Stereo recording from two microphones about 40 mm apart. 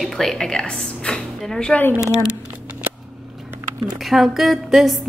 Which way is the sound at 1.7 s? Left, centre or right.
Left.